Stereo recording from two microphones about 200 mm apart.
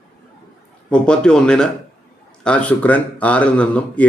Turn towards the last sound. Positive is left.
turn(degrees=5)  # may be behind; listen again after turning